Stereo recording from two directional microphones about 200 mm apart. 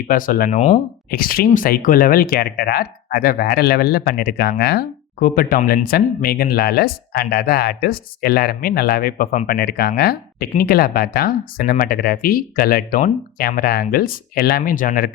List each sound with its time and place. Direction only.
0.1 s speech: 45° left (ahead or behind)
1.1 s speech: 45° left (ahead or behind)
9.5 s speech: 55° left (ahead or behind)